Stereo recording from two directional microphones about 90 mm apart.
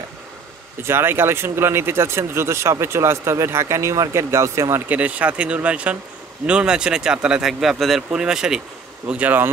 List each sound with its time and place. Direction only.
0.8 s speech: 25° right (ahead or behind)
4.8 s speech: 15° right (ahead or behind)